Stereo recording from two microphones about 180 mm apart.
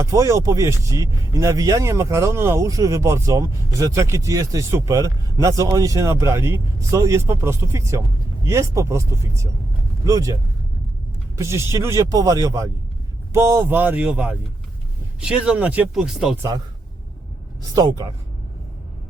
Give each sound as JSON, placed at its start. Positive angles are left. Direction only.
{"t": 0.0, "sound": "speech", "side_deg": -15}
{"t": 11.3, "sound": "speech", "side_deg": -15}
{"t": 17.7, "sound": "speech", "side_deg": -20}